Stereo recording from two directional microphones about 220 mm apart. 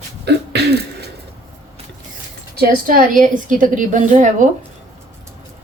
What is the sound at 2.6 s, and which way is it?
A woman's voice, 40° right (ahead or behind).